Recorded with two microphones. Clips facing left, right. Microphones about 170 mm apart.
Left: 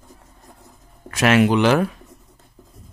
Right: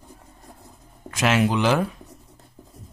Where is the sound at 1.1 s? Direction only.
65° left (ahead or behind).